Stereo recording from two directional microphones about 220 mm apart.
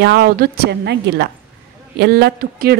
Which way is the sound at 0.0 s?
45° right (ahead or behind).